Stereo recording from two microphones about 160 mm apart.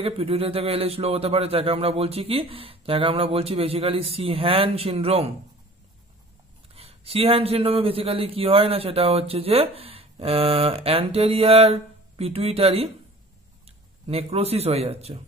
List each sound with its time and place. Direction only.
0.0 s a man's voice: 40° right (ahead or behind)
6.7 s a man's voice: 40° right (ahead or behind)